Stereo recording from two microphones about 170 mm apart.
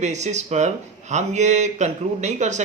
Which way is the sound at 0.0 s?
40° right (ahead or behind).